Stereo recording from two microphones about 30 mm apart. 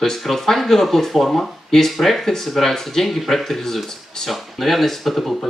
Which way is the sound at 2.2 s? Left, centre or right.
Centre.